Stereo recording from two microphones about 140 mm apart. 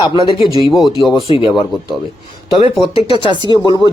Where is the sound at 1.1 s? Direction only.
40° left (ahead or behind).